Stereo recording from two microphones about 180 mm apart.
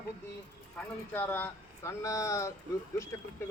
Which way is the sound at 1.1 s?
10° left (ahead or behind).